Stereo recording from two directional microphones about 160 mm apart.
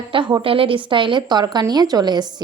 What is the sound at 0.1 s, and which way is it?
A woman's voice, 30° right (ahead or behind).